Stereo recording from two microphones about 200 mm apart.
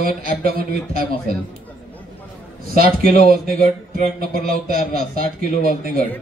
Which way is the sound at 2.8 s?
45° right (ahead or behind).